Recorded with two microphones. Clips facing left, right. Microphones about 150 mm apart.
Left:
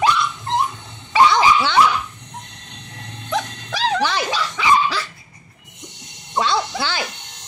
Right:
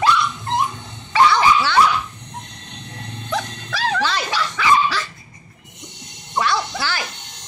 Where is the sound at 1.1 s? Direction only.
15° left (ahead or behind).